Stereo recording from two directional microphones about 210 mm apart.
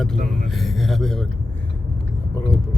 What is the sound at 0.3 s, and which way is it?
Speech, centre (ahead or behind).